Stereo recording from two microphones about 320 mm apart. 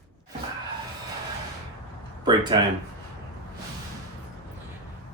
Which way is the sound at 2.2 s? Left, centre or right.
Centre.